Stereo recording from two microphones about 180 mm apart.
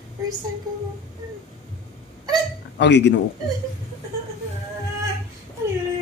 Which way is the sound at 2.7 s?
75° left (ahead or behind).